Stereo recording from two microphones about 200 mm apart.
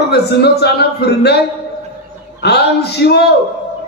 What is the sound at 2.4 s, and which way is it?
Speech, 55° left (ahead or behind).